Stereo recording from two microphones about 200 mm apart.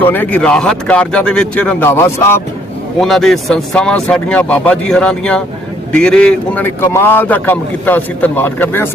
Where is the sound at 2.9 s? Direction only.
Centre (ahead or behind).